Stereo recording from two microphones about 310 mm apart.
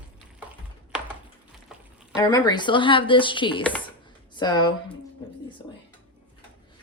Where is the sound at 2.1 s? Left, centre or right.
Centre.